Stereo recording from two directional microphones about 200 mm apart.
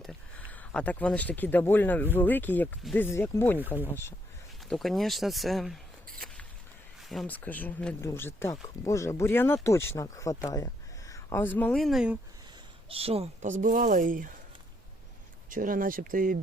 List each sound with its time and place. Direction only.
0.0 s speech: 5° left (ahead or behind)
4.7 s speech: centre (ahead or behind)
12.9 s speech: 30° right (ahead or behind)
15.4 s speech: 45° right (ahead or behind)